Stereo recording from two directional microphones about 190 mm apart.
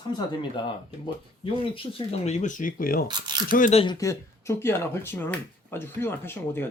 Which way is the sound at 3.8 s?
20° left (ahead or behind).